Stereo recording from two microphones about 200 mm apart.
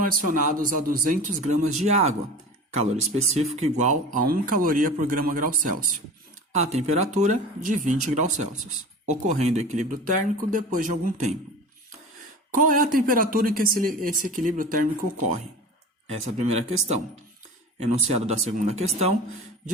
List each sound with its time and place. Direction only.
0.0 s speech: 45° right (ahead or behind)
12.5 s speech: 40° right (ahead or behind)
16.0 s speech: 35° right (ahead or behind)